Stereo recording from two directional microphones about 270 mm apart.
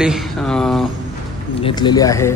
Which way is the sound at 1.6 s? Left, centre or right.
Centre.